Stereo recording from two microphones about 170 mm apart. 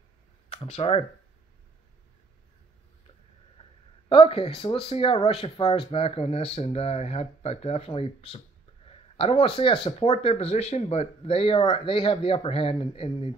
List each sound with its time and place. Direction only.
0.7 s speech: 35° left (ahead or behind)
4.1 s speech: 30° left (ahead or behind)
8.8 s a sound: 35° left (ahead or behind)
9.8 s speech: 40° left (ahead or behind)